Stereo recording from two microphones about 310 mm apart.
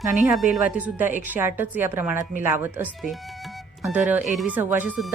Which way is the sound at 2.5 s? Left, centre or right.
Centre.